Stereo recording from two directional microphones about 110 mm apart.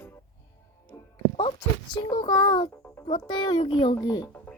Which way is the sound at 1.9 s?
45° left (ahead or behind).